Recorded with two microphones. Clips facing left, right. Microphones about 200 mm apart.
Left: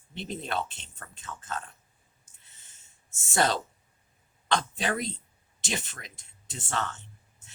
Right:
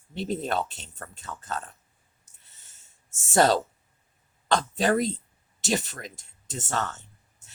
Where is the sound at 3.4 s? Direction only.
40° right (ahead or behind).